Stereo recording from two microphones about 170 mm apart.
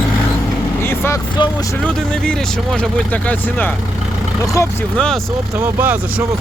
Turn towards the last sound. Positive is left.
turn(degrees=5)  # may be behind; listen again after turning